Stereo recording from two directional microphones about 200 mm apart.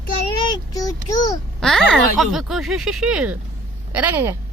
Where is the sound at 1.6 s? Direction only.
Centre (ahead or behind).